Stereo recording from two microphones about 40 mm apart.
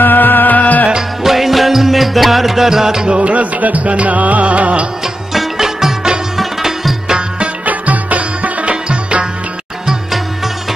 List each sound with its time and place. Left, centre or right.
0.0 s music: left
1.2 s music: centre
3.2 s music: right
5.0 s music: centre
7.1 s music: right
7.6 s music: right
8.8 s music: right